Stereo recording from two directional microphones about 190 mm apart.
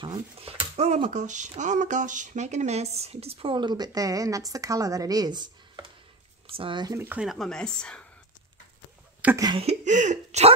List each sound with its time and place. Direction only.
0.0 s speech: 30° right (ahead or behind)
7.1 s speech: 5° right (ahead or behind)
9.2 s speech: 10° right (ahead or behind)
9.5 s speech: 35° right (ahead or behind)